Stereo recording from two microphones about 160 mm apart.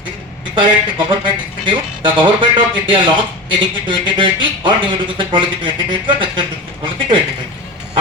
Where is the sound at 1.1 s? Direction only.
30° right (ahead or behind).